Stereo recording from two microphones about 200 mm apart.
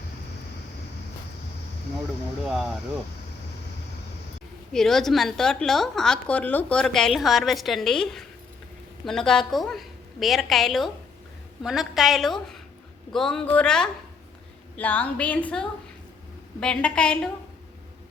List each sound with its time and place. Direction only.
2.4 s a woman's voice: centre (ahead or behind)
4.7 s a woman's voice: centre (ahead or behind)